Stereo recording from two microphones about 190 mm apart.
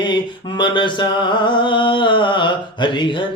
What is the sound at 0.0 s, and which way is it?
Mantra, 25° left (ahead or behind).